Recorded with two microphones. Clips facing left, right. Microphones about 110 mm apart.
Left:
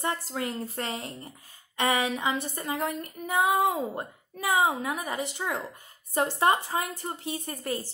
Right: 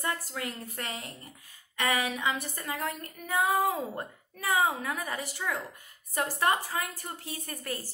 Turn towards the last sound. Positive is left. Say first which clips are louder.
# left 5 dB
turn(degrees=25)  # may be behind; listen again after turning